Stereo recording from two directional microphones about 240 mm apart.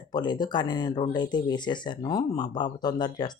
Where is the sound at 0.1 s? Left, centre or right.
Centre.